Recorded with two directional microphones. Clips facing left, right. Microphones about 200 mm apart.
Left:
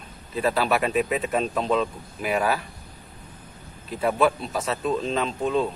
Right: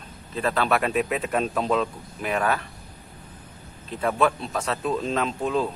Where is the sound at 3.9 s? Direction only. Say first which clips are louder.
Left 1 dB; 5° left (ahead or behind).